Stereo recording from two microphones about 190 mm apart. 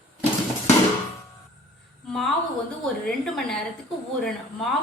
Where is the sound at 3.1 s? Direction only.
Centre (ahead or behind).